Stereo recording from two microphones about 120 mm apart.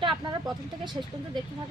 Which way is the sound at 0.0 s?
40° right (ahead or behind).